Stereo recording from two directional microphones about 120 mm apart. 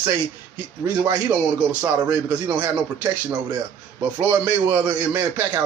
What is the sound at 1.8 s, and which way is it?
A man's voice, 15° right (ahead or behind).